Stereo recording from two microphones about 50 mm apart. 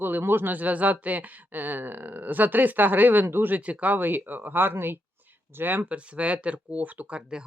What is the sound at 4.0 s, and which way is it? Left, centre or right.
Speech, right.